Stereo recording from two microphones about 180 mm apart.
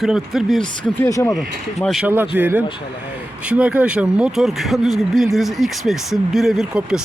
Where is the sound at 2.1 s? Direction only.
10° right (ahead or behind).